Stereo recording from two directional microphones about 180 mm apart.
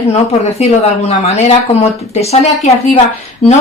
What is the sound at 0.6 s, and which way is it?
Speech, 35° left (ahead or behind).